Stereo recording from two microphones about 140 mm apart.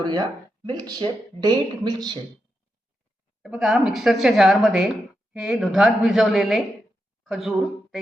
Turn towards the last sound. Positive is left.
turn(degrees=0)  # may be behind; listen again after turning